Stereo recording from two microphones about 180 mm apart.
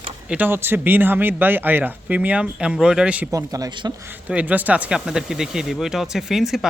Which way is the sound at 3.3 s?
20° right (ahead or behind).